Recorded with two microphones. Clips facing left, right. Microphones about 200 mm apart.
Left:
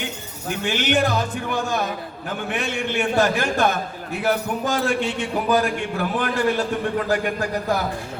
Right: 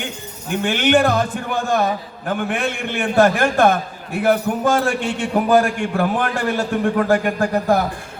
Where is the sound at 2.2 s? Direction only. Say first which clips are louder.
Right 5 dB; 55° right (ahead or behind).